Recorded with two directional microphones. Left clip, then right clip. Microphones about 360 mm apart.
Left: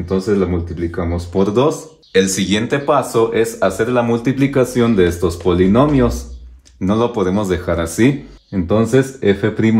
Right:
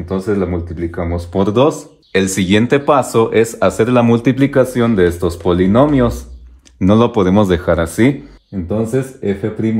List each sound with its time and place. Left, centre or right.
0.1 s speech: centre
8.6 s speech: centre